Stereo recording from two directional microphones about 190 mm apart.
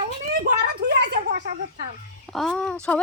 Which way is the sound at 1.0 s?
50° right (ahead or behind).